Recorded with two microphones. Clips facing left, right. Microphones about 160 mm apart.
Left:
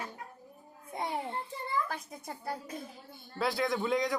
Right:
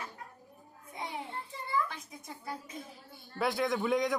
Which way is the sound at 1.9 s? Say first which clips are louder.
Left 5 dB; 60° left (ahead or behind).